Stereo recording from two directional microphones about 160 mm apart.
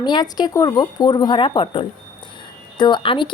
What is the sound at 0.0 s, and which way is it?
A woman's voice, 25° left (ahead or behind).